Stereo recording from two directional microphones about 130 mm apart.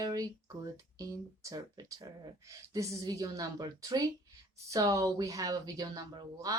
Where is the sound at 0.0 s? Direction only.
25° right (ahead or behind).